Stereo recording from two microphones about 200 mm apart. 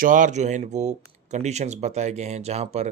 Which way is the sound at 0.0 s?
40° right (ahead or behind).